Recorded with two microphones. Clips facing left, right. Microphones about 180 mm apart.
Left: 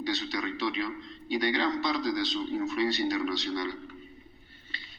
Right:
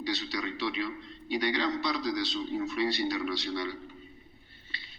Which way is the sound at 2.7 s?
45° left (ahead or behind).